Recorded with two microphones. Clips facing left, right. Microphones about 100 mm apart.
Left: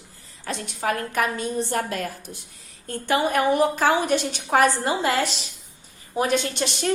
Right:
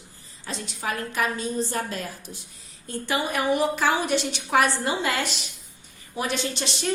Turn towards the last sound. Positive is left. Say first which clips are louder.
# left 3 dB
turn(degrees=50)  # may be behind; listen again after turning